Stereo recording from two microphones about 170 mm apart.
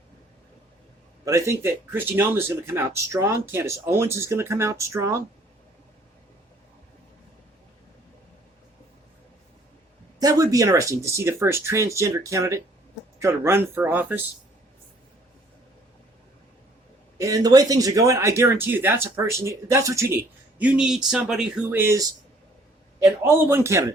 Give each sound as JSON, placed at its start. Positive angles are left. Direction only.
{"t": 1.2, "sound": "speech", "side_deg": -20}
{"t": 10.2, "sound": "speech", "side_deg": -20}
{"t": 17.2, "sound": "speech", "side_deg": -20}
{"t": 20.6, "sound": "speech", "side_deg": -5}
{"t": 23.2, "sound": "speech", "side_deg": -15}